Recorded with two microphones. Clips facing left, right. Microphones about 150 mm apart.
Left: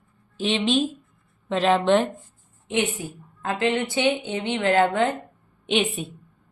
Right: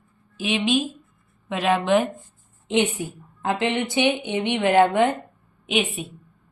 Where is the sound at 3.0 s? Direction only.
20° right (ahead or behind).